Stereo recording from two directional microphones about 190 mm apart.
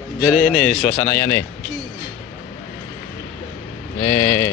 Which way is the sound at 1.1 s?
10° left (ahead or behind).